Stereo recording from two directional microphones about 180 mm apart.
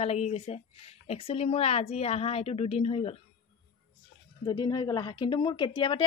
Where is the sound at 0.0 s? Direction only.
35° left (ahead or behind).